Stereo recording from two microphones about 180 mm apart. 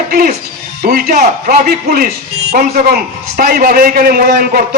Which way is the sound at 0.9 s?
55° right (ahead or behind).